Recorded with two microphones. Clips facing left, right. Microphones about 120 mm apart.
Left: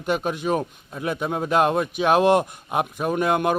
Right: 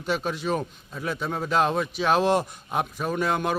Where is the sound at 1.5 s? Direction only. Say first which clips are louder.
Left 3 dB; 55° left (ahead or behind).